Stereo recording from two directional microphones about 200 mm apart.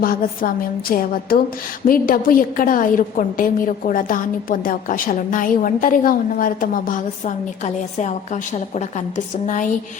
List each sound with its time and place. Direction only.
0.0 s a woman's voice: 45° left (ahead or behind)